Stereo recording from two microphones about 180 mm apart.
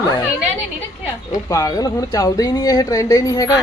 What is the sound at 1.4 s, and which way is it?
Speech, 20° left (ahead or behind).